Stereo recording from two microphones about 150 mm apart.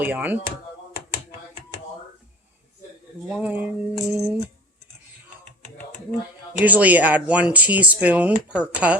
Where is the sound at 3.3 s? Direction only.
10° right (ahead or behind).